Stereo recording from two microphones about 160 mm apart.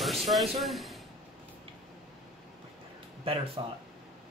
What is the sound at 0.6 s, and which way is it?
Speech, centre (ahead or behind).